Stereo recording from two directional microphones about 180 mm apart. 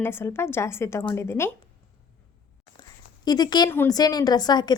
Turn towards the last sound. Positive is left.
turn(degrees=25)  # may be behind; listen again after turning